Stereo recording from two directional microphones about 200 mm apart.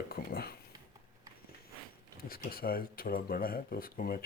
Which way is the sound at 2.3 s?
45° left (ahead or behind).